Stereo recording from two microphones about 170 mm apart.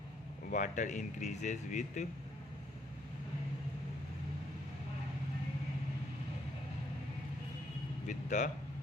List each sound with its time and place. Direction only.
0.5 s a man's voice: 45° left (ahead or behind)
8.0 s speech: 45° left (ahead or behind)